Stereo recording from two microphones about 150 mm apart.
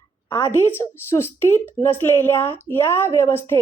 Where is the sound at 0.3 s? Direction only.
15° left (ahead or behind).